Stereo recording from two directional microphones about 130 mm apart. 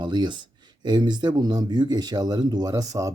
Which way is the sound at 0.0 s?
35° right (ahead or behind).